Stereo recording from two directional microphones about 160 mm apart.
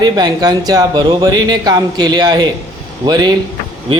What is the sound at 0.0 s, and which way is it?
A man's voice, 25° right (ahead or behind).